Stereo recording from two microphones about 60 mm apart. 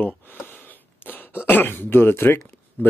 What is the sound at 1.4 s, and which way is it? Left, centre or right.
Speech, left.